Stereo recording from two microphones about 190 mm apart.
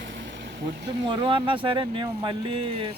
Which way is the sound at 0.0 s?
70° right (ahead or behind).